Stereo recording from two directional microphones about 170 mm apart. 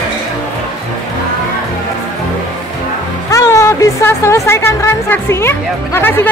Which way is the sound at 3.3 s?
15° left (ahead or behind).